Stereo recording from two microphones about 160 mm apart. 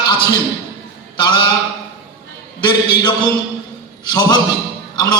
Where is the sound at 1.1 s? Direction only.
30° left (ahead or behind).